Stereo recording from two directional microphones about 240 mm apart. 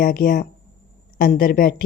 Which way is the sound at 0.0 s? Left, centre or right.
Left.